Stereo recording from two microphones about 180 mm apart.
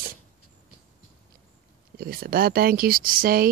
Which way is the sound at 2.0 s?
55° right (ahead or behind).